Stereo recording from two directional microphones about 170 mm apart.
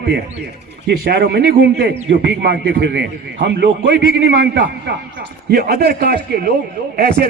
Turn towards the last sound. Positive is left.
turn(degrees=-65)  # may be behind; listen again after turning